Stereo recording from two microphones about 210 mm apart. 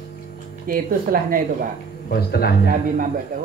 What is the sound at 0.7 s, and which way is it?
Speech, 40° right (ahead or behind).